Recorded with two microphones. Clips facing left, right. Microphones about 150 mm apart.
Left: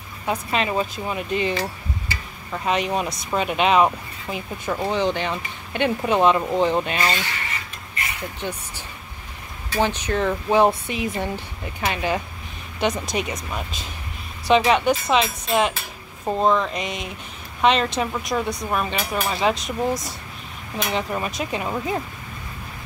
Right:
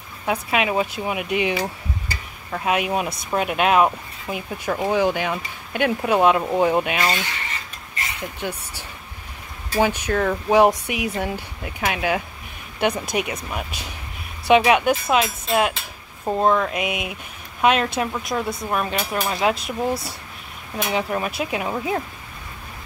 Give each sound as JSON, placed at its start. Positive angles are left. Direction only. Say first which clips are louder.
{"t": 0.3, "sound": "speech", "louder": "right 2 dB", "side_deg": -10}
{"t": 8.2, "sound": "speech", "louder": "right 2 dB", "side_deg": -10}